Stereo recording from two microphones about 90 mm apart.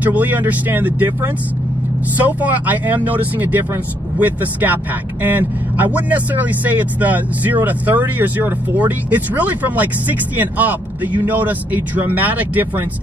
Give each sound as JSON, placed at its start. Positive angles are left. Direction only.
{"t": 0.0, "sound": "speech", "side_deg": -20}
{"t": 2.1, "sound": "speech", "side_deg": -20}